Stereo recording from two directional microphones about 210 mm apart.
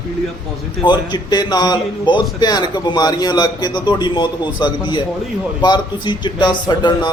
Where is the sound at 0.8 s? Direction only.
20° left (ahead or behind).